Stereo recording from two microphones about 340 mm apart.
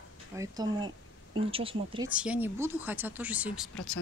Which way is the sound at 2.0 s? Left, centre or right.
Centre.